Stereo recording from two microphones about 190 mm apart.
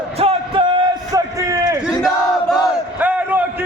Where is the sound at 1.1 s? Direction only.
15° right (ahead or behind).